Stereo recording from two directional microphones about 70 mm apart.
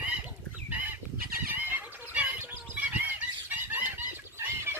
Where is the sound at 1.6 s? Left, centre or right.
Right.